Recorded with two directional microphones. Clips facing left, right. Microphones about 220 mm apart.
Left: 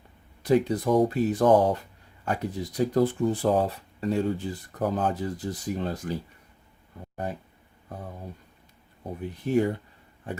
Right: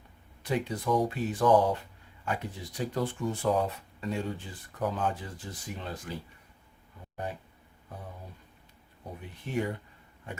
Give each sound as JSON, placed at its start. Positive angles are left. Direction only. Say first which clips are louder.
{"t": 0.4, "sound": "speech", "louder": "left 8 dB", "side_deg": 40}
{"t": 9.5, "sound": "speech", "louder": "left 8 dB", "side_deg": 35}